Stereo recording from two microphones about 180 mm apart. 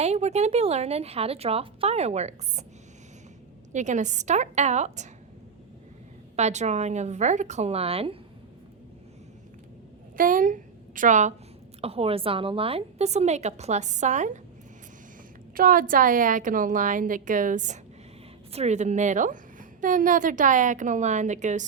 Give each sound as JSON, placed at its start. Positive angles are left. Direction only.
{"t": 0.0, "sound": "a woman's voice", "side_deg": -40}
{"t": 3.7, "sound": "a woman's voice", "side_deg": -40}
{"t": 6.3, "sound": "a woman's voice", "side_deg": -40}
{"t": 10.2, "sound": "a woman's voice", "side_deg": -50}
{"t": 15.5, "sound": "a woman's voice", "side_deg": -50}